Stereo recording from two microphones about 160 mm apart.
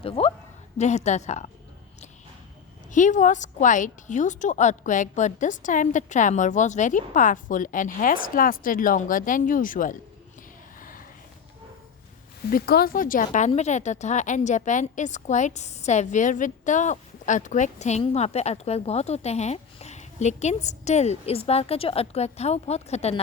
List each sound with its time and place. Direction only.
0.0 s a woman's voice: 35° left (ahead or behind)
0.8 s a woman's voice: 45° left (ahead or behind)
2.9 s a woman's voice: 50° left (ahead or behind)
10.8 s a sound: 60° left (ahead or behind)
12.5 s a woman's voice: 70° left (ahead or behind); by 23.2 s 40° left (ahead or behind)